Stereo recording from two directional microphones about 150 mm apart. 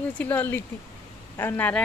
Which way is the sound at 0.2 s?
10° left (ahead or behind).